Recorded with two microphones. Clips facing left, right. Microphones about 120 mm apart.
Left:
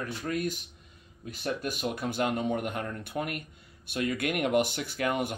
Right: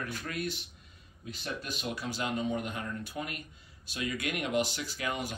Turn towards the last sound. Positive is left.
turn(degrees=55)  # may be behind; listen again after turning